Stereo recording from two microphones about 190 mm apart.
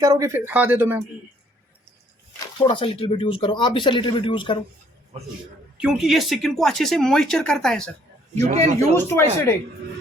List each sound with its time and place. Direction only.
0.0 s speech: 15° right (ahead or behind)
2.6 s speech: 30° left (ahead or behind)
5.8 s speech: 5° right (ahead or behind)
8.4 s speech: 35° right (ahead or behind)
9.0 s speech: 10° left (ahead or behind)